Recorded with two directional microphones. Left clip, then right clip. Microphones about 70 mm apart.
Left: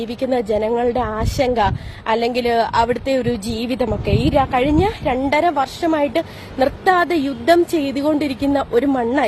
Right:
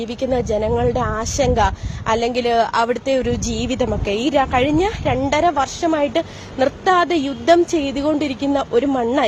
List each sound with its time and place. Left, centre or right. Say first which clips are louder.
0.0 s speech: even; left
3.8 s a woman's voice: even; centre
4.7 s speech: left 1 dB; left